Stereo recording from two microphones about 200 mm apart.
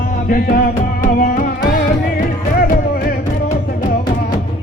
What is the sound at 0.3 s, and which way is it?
Music, 45° left (ahead or behind).